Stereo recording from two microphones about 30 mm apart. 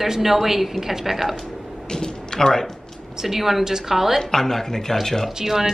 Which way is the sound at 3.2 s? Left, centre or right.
Centre.